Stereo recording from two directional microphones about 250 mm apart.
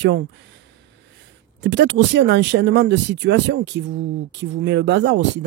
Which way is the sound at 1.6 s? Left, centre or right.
Right.